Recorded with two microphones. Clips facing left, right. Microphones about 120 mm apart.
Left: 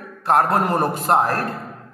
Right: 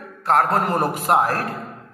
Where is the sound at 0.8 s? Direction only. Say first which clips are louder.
Even; 5° right (ahead or behind).